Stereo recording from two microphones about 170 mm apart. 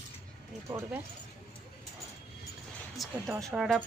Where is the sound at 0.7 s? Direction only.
15° right (ahead or behind).